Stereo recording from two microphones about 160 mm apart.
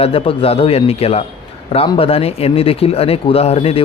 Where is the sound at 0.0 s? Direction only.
35° left (ahead or behind).